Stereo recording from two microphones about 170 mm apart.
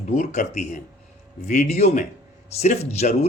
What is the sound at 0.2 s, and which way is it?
Speech, 45° left (ahead or behind).